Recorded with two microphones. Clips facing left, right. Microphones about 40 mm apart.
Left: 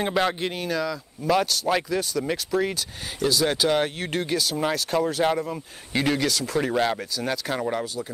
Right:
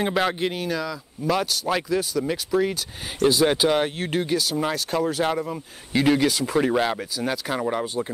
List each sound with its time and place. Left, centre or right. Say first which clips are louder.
0.0 s speech: right 1 dB; centre
3.4 s speech: right 3 dB; centre
3.7 s speech: right 1 dB; centre
6.1 s speech: right 3 dB; centre
7.8 s speech: right 4 dB; right